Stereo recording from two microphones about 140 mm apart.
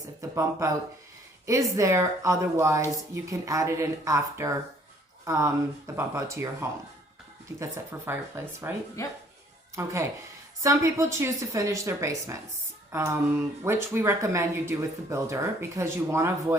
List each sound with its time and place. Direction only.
0.2 s speech: 20° right (ahead or behind)